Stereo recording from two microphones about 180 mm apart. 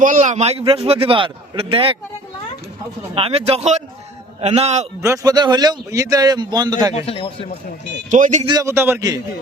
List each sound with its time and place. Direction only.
0.0 s a man's voice: 45° right (ahead or behind); by 2.0 s 30° right (ahead or behind)
3.2 s a man's voice: 35° right (ahead or behind)
4.9 s a man's voice: 15° right (ahead or behind)
6.9 s a man's voice: 30° left (ahead or behind)
8.1 s speech: 40° right (ahead or behind)
8.4 s a man's voice: 20° right (ahead or behind)